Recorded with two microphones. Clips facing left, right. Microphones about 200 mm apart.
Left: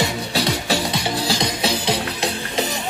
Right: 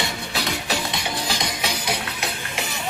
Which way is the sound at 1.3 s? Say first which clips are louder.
Left 6 dB; 35° left (ahead or behind).